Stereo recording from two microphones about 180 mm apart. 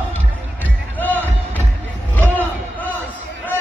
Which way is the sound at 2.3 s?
10° left (ahead or behind).